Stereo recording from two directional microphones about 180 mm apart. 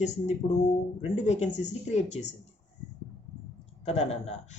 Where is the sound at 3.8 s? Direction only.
35° left (ahead or behind).